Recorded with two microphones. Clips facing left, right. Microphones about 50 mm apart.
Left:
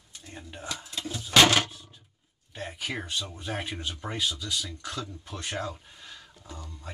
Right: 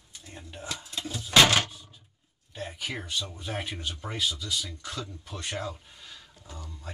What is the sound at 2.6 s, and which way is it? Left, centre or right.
Speech, centre.